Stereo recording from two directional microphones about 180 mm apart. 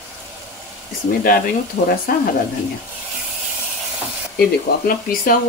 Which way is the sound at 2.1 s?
50° left (ahead or behind).